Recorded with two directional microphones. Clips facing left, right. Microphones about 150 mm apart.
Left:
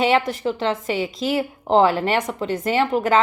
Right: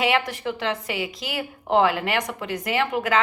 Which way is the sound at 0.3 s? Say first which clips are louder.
Left 5 dB; 25° left (ahead or behind).